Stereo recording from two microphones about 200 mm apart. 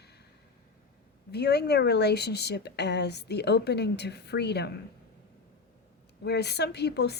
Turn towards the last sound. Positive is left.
turn(degrees=55)  # may be behind; listen again after turning